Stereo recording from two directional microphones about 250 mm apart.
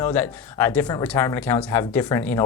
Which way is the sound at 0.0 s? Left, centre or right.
Centre.